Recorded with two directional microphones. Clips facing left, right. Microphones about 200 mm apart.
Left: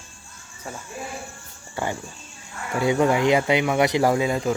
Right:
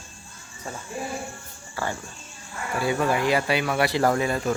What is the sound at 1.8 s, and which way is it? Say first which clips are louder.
Speech: left 2 dB; 25° left (ahead or behind).